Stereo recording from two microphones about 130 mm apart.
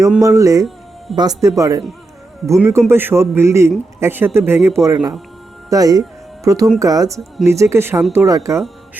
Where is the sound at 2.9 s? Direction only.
15° right (ahead or behind).